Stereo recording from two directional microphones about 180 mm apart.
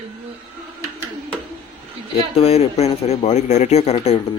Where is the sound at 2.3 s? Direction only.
35° left (ahead or behind).